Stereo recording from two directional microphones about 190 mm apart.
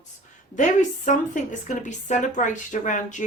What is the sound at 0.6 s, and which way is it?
A woman's voice, 40° left (ahead or behind).